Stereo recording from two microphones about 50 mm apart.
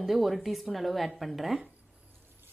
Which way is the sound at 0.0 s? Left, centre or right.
Centre.